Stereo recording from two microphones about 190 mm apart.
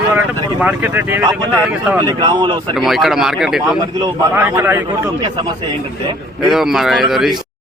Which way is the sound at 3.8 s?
20° right (ahead or behind).